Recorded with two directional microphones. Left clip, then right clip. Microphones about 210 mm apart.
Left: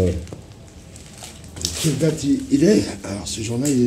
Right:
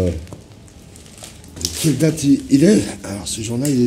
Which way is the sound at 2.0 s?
30° right (ahead or behind).